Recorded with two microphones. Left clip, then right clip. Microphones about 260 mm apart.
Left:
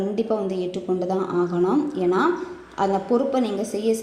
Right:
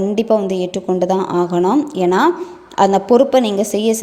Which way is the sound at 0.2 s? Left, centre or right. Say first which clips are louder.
Right 10 dB; right.